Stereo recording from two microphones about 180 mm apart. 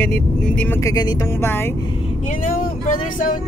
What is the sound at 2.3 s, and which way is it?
Vehicle, 50° left (ahead or behind).